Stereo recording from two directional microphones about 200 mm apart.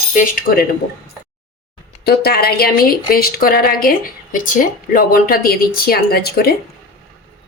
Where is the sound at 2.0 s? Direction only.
50° left (ahead or behind).